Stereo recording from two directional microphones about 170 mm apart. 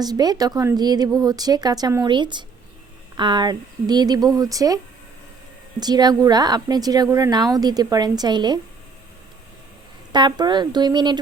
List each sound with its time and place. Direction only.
0.0 s a woman's voice: 25° right (ahead or behind)
5.8 s a woman's voice: 25° right (ahead or behind)
10.1 s a woman's voice: 25° right (ahead or behind)